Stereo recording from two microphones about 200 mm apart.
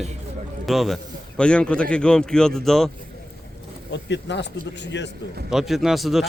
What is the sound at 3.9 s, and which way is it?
Speech, 60° left (ahead or behind).